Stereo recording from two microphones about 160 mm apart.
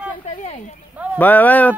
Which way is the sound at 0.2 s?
45° left (ahead or behind).